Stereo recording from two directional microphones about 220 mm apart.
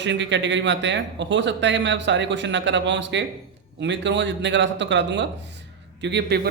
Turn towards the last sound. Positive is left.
turn(degrees=-50)  # may be behind; listen again after turning